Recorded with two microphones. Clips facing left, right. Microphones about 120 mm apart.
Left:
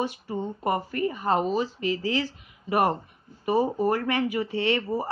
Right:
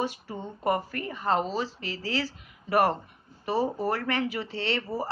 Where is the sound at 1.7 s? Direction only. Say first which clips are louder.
Left 6 dB; 35° right (ahead or behind).